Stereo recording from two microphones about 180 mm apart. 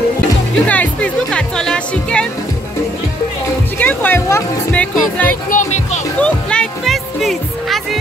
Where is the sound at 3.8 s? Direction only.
10° left (ahead or behind).